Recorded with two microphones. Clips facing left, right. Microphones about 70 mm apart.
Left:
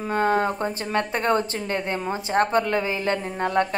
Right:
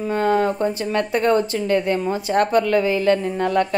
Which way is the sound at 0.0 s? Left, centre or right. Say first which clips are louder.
Right 3 dB; left.